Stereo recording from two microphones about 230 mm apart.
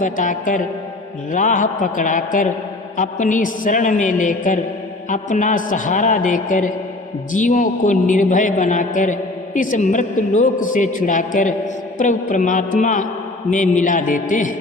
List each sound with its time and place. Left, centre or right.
0.0 s a man's voice: left